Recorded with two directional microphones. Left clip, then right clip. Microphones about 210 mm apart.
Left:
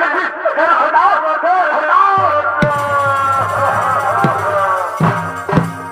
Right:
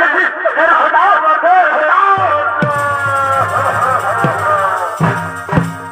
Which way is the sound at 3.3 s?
25° right (ahead or behind).